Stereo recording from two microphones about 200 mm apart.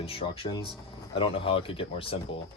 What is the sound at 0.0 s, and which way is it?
Speech, 25° left (ahead or behind).